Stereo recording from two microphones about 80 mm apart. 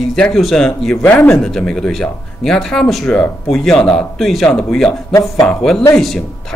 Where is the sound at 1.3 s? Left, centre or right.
Centre.